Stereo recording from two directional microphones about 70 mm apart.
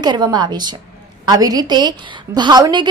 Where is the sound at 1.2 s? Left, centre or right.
Right.